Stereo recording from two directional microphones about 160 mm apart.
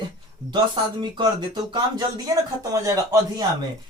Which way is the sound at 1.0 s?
30° right (ahead or behind).